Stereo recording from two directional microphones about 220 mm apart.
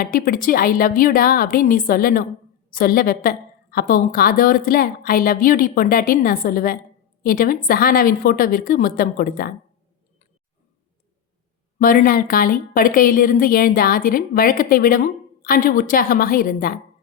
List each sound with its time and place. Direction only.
0.0 s a woman's voice: 40° left (ahead or behind)
11.8 s a woman's voice: 40° left (ahead or behind)